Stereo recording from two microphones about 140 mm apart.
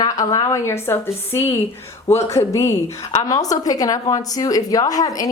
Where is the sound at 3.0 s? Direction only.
30° left (ahead or behind).